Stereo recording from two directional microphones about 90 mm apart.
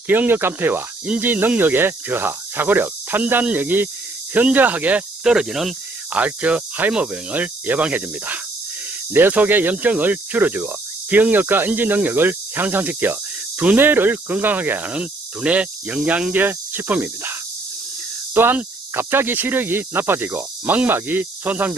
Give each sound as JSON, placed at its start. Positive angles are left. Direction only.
{"t": 0.1, "sound": "speech", "side_deg": -25}
{"t": 6.1, "sound": "speech", "side_deg": -15}
{"t": 18.3, "sound": "speech", "side_deg": -25}